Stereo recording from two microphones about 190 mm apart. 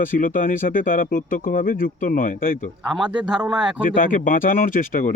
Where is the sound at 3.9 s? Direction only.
45° left (ahead or behind).